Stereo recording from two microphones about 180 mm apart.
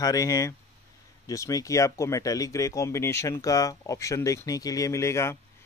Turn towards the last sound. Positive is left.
turn(degrees=15)  # may be behind; listen again after turning